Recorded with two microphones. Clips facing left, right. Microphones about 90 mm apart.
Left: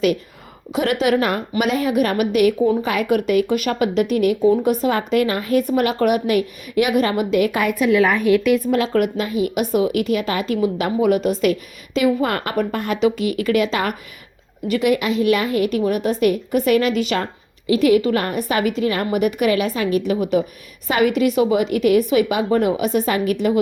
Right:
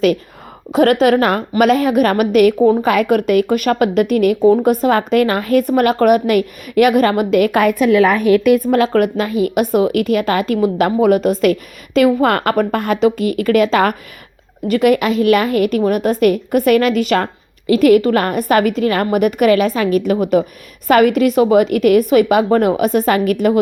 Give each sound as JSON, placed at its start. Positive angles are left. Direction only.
{"t": 0.7, "sound": "speech", "side_deg": -40}
{"t": 2.6, "sound": "a woman's voice", "side_deg": -40}
{"t": 2.8, "sound": "a woman's voice", "side_deg": -60}
{"t": 4.4, "sound": "a woman's voice", "side_deg": -45}